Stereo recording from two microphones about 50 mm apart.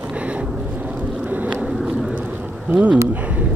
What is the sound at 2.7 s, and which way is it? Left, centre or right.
Speech, right.